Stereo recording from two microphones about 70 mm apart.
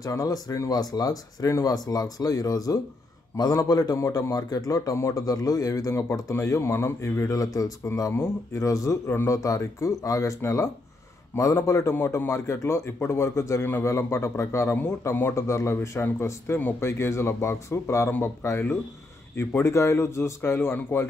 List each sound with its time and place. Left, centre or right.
0.0 s a man's voice: left
4.1 s speech: left
4.9 s speech: left
5.2 s speech: left
6.3 s speech: left
9.0 s speech: left
9.4 s speech: left
11.3 s speech: left
14.8 s speech: left
20.5 s speech: left